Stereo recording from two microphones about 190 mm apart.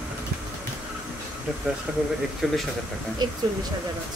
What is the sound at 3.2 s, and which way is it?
Speech, 20° right (ahead or behind).